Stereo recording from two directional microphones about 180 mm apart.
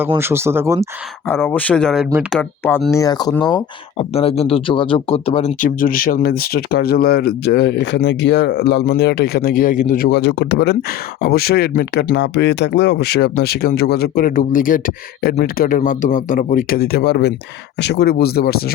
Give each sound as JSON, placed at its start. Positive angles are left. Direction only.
{"t": 0.2, "sound": "speech", "side_deg": -15}
{"t": 1.3, "sound": "speech", "side_deg": 10}
{"t": 2.9, "sound": "speech", "side_deg": 20}
{"t": 3.9, "sound": "speech", "side_deg": 35}